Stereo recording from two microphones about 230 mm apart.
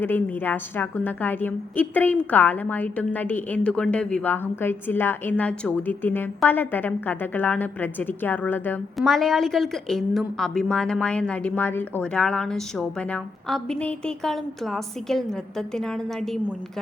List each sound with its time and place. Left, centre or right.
0.0 s a woman's voice: centre